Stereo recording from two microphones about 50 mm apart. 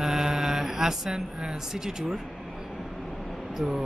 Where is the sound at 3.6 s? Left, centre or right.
Centre.